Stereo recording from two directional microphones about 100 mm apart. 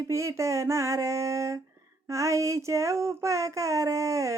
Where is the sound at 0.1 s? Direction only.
30° right (ahead or behind).